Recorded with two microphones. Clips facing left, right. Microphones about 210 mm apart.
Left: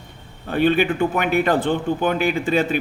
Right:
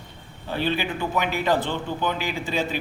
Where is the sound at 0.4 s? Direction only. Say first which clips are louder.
Left 8 dB; 55° left (ahead or behind).